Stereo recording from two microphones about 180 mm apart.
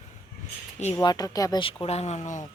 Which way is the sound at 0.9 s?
20° left (ahead or behind).